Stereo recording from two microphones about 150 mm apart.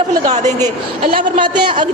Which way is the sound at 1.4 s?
30° right (ahead or behind).